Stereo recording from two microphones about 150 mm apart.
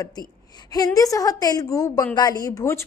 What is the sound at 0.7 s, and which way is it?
A woman's voice, 25° left (ahead or behind).